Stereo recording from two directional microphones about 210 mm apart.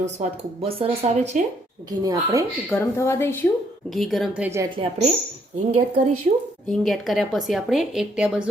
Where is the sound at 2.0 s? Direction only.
15° right (ahead or behind).